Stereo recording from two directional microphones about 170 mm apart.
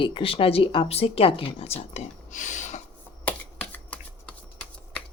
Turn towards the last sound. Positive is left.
turn(degrees=10)  # may be behind; listen again after turning